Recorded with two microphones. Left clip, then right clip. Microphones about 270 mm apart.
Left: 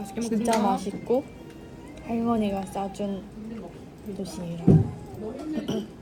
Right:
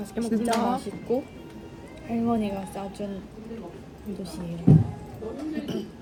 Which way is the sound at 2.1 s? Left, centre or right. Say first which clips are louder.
Left 1 dB; centre.